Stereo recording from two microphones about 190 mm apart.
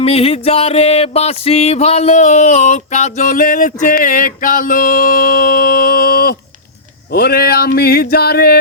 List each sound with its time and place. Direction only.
0.0 s music: 30° left (ahead or behind); by 6.3 s 50° left (ahead or behind)
7.1 s speech: 55° left (ahead or behind)